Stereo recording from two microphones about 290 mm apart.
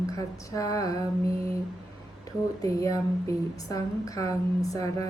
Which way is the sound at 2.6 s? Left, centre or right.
Centre.